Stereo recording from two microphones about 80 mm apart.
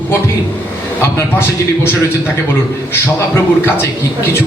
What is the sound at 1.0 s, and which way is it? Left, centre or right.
A man's voice, left.